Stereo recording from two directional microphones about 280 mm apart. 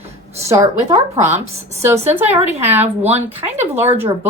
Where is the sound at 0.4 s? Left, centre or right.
Centre.